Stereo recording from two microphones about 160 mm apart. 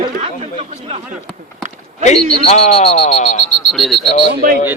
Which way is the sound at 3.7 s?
Centre (ahead or behind).